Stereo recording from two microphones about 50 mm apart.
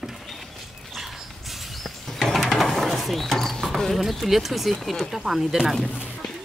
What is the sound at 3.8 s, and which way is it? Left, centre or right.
Speech, centre.